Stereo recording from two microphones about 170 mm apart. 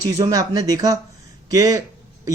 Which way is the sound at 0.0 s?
20° right (ahead or behind).